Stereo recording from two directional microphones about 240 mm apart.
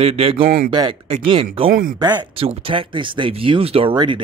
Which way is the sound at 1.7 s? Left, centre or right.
Right.